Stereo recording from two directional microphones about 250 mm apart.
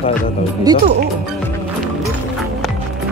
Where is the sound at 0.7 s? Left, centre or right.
Centre.